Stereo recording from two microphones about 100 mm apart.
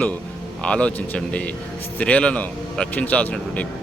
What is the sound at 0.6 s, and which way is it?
A man's voice, 10° left (ahead or behind).